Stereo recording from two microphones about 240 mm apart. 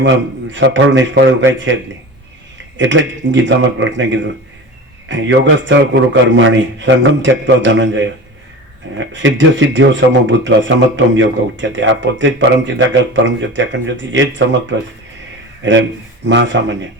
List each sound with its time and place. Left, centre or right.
0.5 s speech: right
2.7 s speech: right
9.1 s speech: right